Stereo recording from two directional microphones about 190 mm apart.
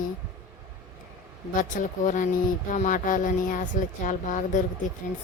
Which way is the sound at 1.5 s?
45° left (ahead or behind).